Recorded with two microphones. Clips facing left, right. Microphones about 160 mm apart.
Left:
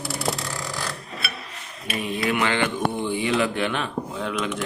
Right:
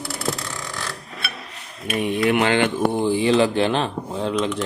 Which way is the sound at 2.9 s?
30° right (ahead or behind).